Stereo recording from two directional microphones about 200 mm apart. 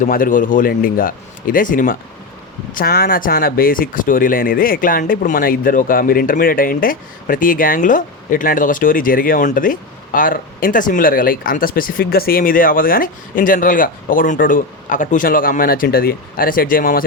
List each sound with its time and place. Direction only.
0.0 s speech: 40° left (ahead or behind)